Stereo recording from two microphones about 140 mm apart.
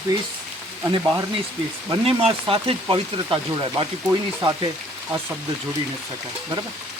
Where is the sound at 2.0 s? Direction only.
40° right (ahead or behind).